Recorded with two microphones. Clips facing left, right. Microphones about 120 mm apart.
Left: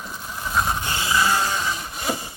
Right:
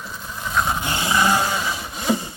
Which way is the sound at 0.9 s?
25° right (ahead or behind).